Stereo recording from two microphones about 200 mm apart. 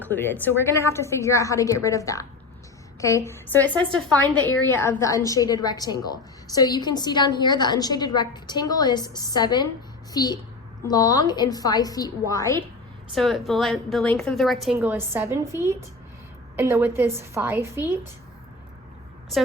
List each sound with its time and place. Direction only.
0.1 s a woman's voice: 10° left (ahead or behind)
13.1 s a woman's voice: centre (ahead or behind)
14.8 s a woman's voice: 10° right (ahead or behind)